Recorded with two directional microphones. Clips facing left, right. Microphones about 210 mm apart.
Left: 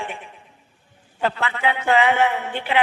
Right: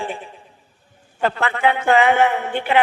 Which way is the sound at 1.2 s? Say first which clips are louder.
Right 4 dB; 50° right (ahead or behind).